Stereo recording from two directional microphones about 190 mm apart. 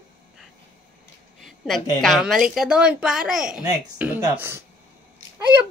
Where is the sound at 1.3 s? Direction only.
Centre (ahead or behind).